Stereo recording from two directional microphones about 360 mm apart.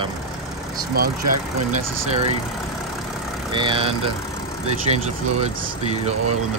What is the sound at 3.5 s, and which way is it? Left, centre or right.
Speech, centre.